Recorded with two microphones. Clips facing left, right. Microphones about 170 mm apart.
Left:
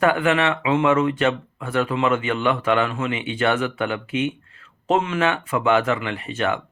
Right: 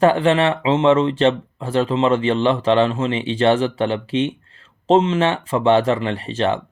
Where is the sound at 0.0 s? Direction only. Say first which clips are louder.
Right 4 dB; 30° right (ahead or behind).